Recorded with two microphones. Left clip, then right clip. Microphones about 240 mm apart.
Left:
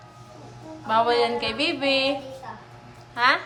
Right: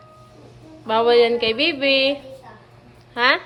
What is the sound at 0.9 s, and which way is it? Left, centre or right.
Speech, centre.